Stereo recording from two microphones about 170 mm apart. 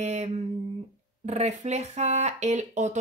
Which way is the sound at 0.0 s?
40° right (ahead or behind).